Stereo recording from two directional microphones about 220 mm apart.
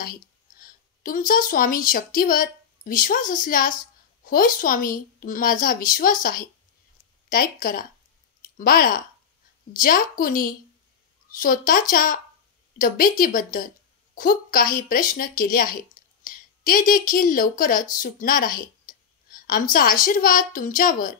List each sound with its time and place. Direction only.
0.0 s a woman's voice: 40° left (ahead or behind)